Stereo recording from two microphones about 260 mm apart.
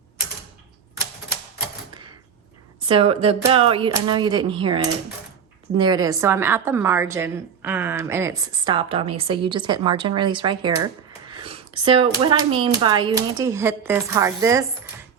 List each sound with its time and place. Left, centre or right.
2.8 s a woman's voice: right